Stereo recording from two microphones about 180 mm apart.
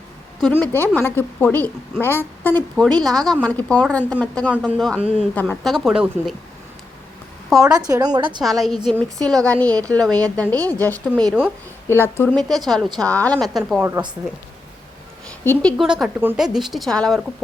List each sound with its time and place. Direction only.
0.6 s a woman's voice: 10° left (ahead or behind)
5.3 s a woman's voice: 10° left (ahead or behind)
7.6 s a woman's voice: 20° right (ahead or behind)
8.4 s a woman's voice: centre (ahead or behind)
13.8 s a woman's voice: 15° right (ahead or behind)
15.3 s a woman's voice: 5° left (ahead or behind)